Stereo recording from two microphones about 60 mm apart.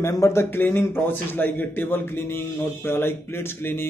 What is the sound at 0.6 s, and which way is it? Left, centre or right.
A man's voice, left.